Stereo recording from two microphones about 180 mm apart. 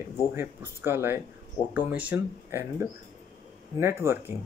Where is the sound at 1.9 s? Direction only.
10° right (ahead or behind).